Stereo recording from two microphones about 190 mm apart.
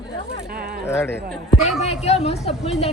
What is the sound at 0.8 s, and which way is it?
Speech, 15° left (ahead or behind).